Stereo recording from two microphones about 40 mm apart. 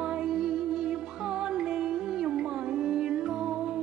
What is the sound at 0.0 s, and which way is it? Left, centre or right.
Music, centre.